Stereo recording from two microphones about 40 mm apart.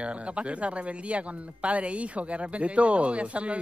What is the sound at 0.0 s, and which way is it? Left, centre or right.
Speech, right.